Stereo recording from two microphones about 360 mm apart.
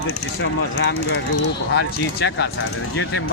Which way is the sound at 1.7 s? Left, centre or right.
Left.